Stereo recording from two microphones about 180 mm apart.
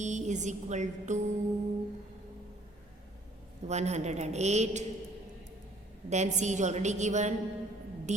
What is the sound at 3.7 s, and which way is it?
A woman's voice, 40° right (ahead or behind).